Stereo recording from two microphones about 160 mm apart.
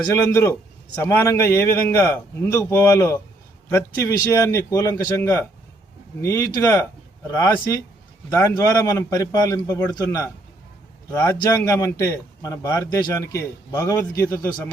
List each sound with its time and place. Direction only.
0.1 s a man's voice: 15° left (ahead or behind)